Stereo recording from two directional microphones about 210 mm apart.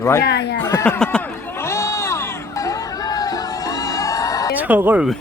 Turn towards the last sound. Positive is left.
turn(degrees=-5)  # may be behind; listen again after turning